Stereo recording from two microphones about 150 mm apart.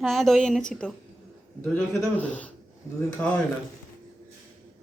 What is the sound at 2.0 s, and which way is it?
Speech, 10° left (ahead or behind).